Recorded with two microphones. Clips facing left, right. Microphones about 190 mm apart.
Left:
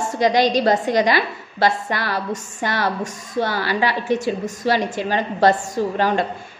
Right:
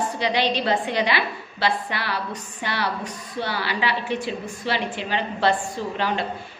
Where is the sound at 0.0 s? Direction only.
45° left (ahead or behind).